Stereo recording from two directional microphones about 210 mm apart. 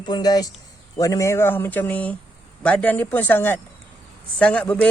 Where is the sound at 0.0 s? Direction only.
20° left (ahead or behind).